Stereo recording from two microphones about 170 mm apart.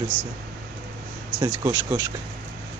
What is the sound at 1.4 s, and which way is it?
Speech, 20° right (ahead or behind).